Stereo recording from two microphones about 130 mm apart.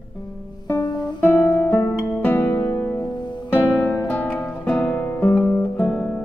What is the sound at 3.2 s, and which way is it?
Music, 35° left (ahead or behind).